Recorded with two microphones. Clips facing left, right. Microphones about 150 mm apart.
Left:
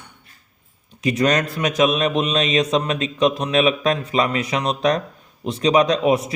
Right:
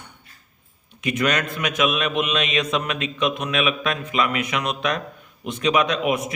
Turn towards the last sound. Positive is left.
turn(degrees=35)  # may be behind; listen again after turning